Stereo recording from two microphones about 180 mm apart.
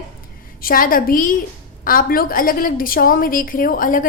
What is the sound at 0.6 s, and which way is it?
A woman's voice, 50° left (ahead or behind).